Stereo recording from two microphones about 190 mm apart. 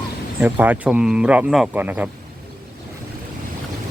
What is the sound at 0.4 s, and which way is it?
Speech, 10° right (ahead or behind).